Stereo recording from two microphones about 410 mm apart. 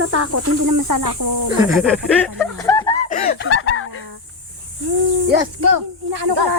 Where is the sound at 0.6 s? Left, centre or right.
Right.